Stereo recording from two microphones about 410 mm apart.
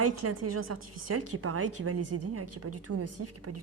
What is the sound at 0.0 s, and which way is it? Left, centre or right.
A woman's voice, right.